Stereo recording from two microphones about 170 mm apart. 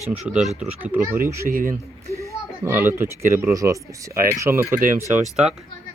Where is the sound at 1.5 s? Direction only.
55° right (ahead or behind).